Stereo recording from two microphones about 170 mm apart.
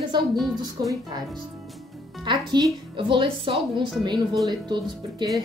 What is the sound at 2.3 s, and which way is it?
Speech, 30° right (ahead or behind).